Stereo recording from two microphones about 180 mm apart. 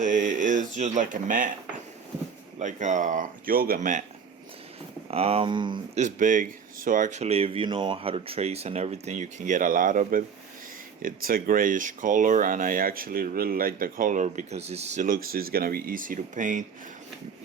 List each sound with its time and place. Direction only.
0.0 s speech: 45° right (ahead or behind)
2.6 s speech: 45° right (ahead or behind)
5.1 s speech: 35° right (ahead or behind)
6.0 s speech: 45° right (ahead or behind)